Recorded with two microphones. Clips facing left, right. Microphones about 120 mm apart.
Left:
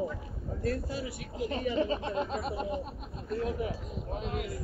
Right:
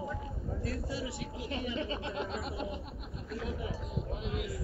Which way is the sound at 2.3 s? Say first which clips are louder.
Left 5 dB; centre (ahead or behind).